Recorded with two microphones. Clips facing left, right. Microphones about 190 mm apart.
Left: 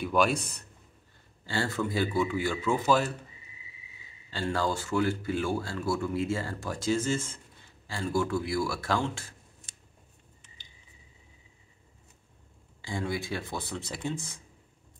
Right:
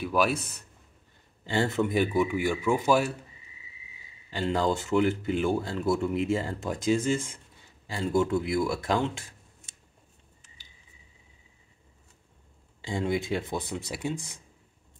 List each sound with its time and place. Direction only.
0.0 s a man's voice: 5° right (ahead or behind)
1.4 s speech: 20° right (ahead or behind)
4.3 s speech: 20° right (ahead or behind)
12.8 s speech: 20° right (ahead or behind)